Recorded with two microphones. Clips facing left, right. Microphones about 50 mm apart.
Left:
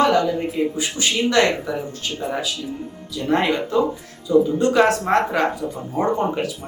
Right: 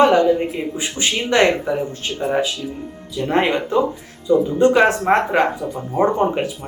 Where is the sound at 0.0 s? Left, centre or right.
Right.